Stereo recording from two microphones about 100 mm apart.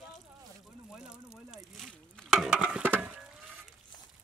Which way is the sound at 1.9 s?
10° left (ahead or behind).